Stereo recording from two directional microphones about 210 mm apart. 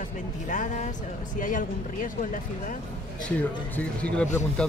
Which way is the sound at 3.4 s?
5° left (ahead or behind).